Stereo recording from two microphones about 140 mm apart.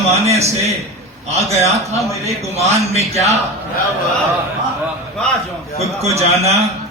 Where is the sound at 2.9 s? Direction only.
50° right (ahead or behind).